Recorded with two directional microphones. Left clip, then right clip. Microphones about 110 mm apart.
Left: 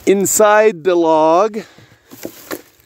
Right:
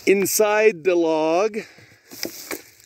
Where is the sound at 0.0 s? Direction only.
40° left (ahead or behind).